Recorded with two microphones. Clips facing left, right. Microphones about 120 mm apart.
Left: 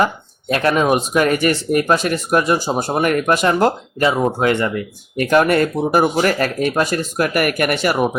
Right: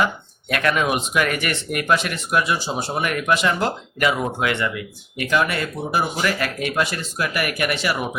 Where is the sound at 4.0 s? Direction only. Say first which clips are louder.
Left 5 dB; 30° left (ahead or behind); by 8.1 s 45° left (ahead or behind).